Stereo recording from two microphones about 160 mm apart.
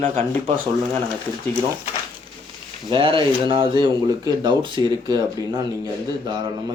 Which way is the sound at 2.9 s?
30° right (ahead or behind).